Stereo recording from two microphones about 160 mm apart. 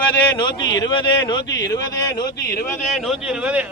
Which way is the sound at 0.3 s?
25° left (ahead or behind).